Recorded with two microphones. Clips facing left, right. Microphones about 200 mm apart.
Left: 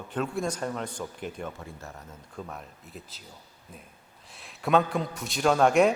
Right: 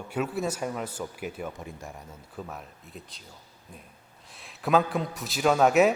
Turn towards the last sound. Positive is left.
turn(degrees=-5)  # may be behind; listen again after turning